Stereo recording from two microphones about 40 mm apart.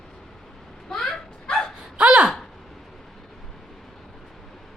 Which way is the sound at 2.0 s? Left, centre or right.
Right.